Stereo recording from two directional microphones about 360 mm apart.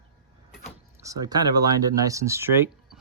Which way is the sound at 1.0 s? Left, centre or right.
Centre.